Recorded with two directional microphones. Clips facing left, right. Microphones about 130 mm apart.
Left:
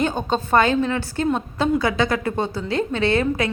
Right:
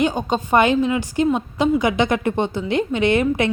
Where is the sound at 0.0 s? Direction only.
15° right (ahead or behind).